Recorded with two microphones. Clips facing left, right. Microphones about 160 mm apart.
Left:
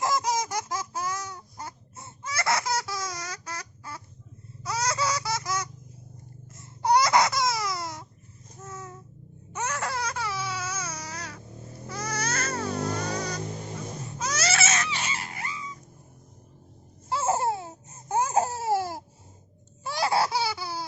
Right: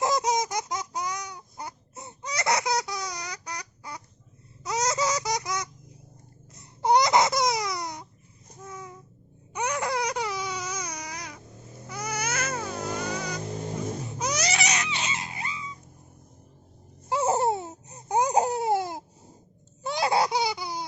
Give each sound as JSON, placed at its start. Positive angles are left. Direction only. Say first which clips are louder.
{"t": 0.0, "sound": "a sound", "louder": "right 2 dB", "side_deg": -20}
{"t": 4.6, "sound": "baby laughter", "louder": "right 2 dB", "side_deg": -20}
{"t": 6.5, "sound": "baby cry", "louder": "right 1 dB", "side_deg": -20}
{"t": 8.6, "sound": "babbling", "louder": "even", "side_deg": -15}
{"t": 9.5, "sound": "baby cry", "louder": "right 3 dB", "side_deg": -15}
{"t": 11.9, "sound": "vehicle", "louder": "even", "side_deg": -10}
{"t": 14.2, "sound": "a sound", "louder": "left 1 dB", "side_deg": -15}
{"t": 17.1, "sound": "a sound", "louder": "right 2 dB", "side_deg": -15}
{"t": 19.8, "sound": "laughter", "louder": "right 1 dB", "side_deg": -20}